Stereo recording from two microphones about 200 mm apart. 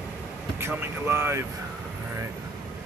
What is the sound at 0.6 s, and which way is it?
Speech, 10° right (ahead or behind).